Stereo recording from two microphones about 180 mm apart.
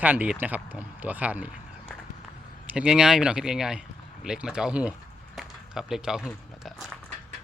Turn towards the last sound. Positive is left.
turn(degrees=0)  # may be behind; listen again after turning